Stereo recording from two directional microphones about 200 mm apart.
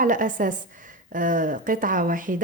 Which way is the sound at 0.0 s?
40° right (ahead or behind).